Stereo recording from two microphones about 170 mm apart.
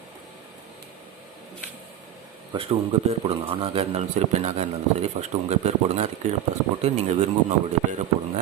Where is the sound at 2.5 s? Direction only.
35° right (ahead or behind).